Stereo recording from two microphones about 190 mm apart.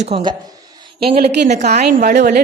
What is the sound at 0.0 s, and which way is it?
Speech, 25° right (ahead or behind).